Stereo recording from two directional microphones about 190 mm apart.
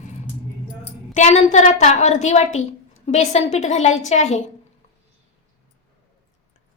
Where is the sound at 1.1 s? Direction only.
35° left (ahead or behind).